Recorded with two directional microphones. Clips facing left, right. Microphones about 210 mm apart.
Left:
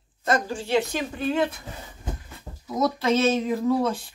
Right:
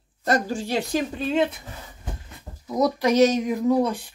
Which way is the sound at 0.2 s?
40° right (ahead or behind).